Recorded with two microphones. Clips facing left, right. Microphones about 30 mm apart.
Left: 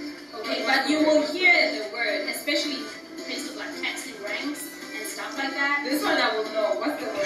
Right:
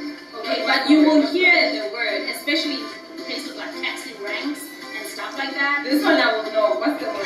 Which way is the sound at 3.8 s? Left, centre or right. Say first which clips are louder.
Right 4 dB; right.